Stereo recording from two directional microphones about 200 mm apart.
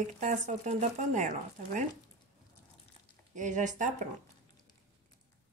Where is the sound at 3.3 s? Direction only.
40° right (ahead or behind).